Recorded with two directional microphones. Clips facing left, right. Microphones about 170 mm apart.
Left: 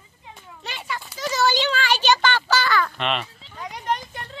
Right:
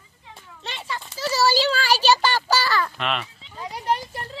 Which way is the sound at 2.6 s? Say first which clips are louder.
Left 1 dB; 30° right (ahead or behind).